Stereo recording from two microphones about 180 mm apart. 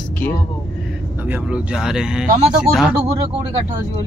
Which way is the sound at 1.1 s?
10° right (ahead or behind).